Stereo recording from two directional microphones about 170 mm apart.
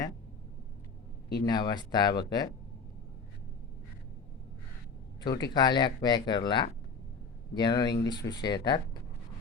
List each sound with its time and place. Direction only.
1.5 s speech: 25° left (ahead or behind)
5.4 s speech: 25° left (ahead or behind)